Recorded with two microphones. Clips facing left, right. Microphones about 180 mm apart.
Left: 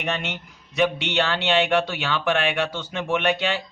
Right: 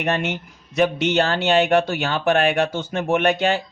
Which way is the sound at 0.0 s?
45° right (ahead or behind).